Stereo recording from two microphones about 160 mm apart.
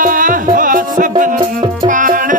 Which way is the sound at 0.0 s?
55° right (ahead or behind).